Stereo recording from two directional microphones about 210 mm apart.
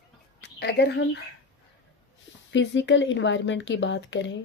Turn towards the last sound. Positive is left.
turn(degrees=60)  # may be behind; listen again after turning